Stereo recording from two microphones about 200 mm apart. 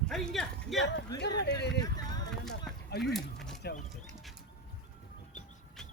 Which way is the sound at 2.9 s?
55° left (ahead or behind).